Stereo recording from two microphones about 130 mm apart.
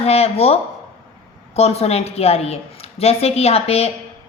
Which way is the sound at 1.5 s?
55° left (ahead or behind).